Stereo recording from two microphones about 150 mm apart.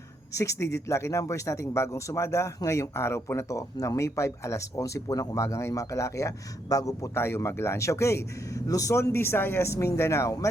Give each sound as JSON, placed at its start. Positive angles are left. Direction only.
{"t": 0.3, "sound": "speech", "side_deg": 20}